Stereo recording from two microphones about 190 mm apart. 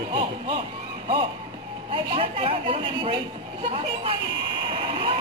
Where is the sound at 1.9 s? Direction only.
30° right (ahead or behind).